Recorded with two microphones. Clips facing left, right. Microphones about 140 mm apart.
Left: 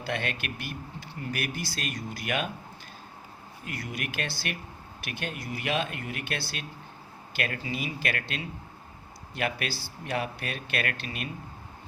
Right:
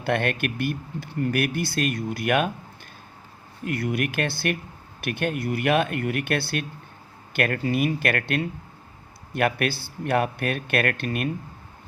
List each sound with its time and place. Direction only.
0.0 s speech: 55° right (ahead or behind)
3.6 s speech: 55° right (ahead or behind)